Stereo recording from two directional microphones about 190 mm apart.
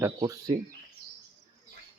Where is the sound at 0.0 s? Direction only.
20° right (ahead or behind).